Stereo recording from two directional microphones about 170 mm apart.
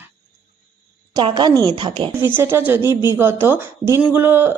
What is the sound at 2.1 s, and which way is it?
A woman's voice, 10° right (ahead or behind).